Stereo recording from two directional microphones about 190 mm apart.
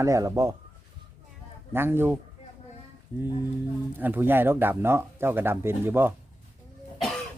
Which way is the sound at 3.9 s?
10° right (ahead or behind).